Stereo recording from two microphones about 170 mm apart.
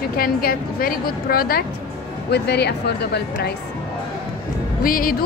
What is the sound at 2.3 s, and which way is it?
Speech, 75° left (ahead or behind).